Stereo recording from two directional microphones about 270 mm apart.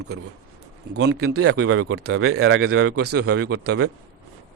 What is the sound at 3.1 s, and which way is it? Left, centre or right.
Speech, right.